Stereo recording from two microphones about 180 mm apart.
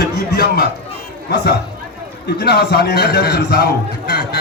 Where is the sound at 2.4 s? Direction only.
65° left (ahead or behind).